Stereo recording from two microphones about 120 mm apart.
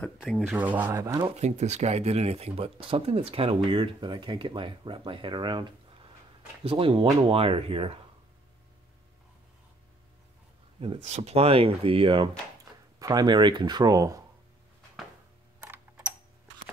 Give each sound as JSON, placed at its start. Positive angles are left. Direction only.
{"t": 0.2, "sound": "speech", "side_deg": 0}
{"t": 0.6, "sound": "speech", "side_deg": -15}
{"t": 0.9, "sound": "speech", "side_deg": -30}
{"t": 1.3, "sound": "speech", "side_deg": -70}
{"t": 11.0, "sound": "speech", "side_deg": -65}
{"t": 13.0, "sound": "speech", "side_deg": -30}
{"t": 15.6, "sound": "typing", "side_deg": -20}